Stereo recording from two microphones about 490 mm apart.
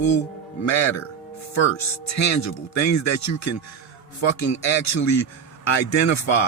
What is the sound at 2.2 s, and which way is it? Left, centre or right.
Speech, left.